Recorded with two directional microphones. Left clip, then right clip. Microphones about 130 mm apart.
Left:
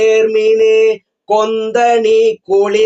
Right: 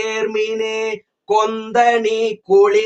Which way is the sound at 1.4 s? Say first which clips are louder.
Left 2 dB; 15° left (ahead or behind).